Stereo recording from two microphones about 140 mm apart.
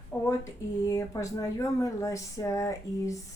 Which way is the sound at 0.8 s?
25° left (ahead or behind).